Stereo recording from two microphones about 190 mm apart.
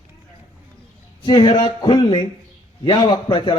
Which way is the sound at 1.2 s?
25° left (ahead or behind).